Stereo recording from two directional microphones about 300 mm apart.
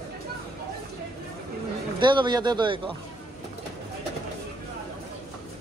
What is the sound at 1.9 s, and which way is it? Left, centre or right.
Speech, centre.